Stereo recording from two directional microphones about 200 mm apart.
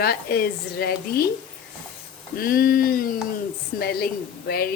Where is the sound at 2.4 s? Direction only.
50° left (ahead or behind).